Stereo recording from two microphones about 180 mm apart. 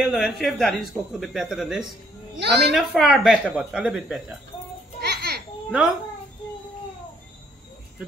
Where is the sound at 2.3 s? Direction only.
65° right (ahead or behind).